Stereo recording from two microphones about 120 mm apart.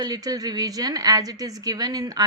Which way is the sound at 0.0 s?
30° right (ahead or behind).